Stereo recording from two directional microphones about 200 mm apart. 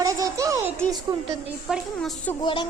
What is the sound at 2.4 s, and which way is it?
Music, 20° left (ahead or behind).